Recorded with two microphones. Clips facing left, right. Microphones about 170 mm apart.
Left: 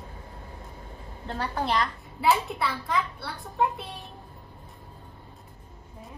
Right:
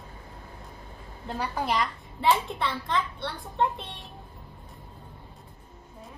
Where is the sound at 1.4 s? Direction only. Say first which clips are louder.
Left 1 dB; 10° right (ahead or behind).